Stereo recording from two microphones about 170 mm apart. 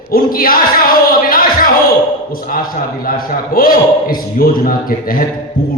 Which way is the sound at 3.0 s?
55° left (ahead or behind).